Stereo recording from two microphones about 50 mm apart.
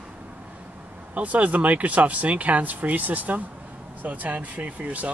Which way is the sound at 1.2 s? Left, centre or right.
Right.